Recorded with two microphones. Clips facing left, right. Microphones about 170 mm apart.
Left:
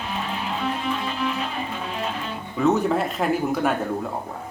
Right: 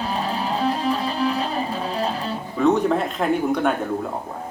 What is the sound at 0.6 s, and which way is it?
Music, 35° right (ahead or behind).